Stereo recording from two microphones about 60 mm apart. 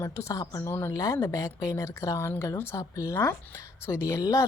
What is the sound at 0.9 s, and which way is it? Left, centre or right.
Speech, left.